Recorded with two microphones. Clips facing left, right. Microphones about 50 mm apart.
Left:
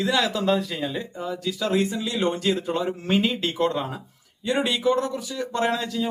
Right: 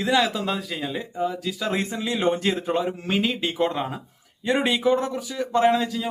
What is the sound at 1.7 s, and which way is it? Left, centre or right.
A man's voice, right.